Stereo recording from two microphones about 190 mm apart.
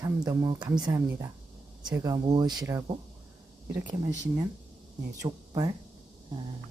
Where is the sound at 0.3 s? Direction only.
20° right (ahead or behind).